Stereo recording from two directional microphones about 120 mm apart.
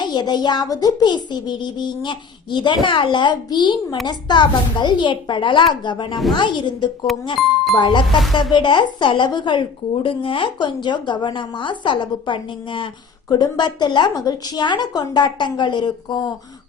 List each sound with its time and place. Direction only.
0.0 s speech: 35° left (ahead or behind)
7.3 s speech: centre (ahead or behind)
7.8 s speech: 40° left (ahead or behind)